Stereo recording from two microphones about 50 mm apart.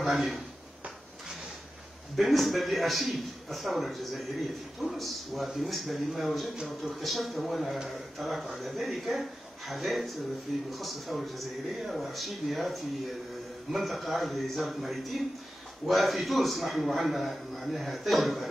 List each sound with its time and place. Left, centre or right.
0.0 s a man's voice: centre
2.1 s a man's voice: centre